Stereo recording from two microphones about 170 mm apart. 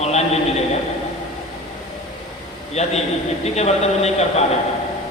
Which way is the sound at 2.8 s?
40° left (ahead or behind).